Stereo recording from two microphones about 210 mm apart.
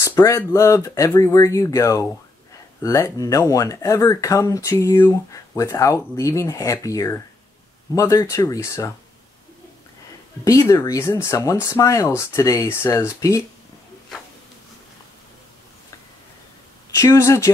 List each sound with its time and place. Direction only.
0.0 s speech: 15° left (ahead or behind)
10.4 s speech: 15° left (ahead or behind)
16.9 s speech: 15° left (ahead or behind)